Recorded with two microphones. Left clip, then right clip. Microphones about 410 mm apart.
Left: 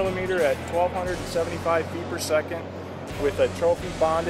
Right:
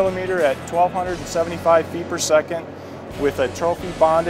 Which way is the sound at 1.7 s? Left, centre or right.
Right.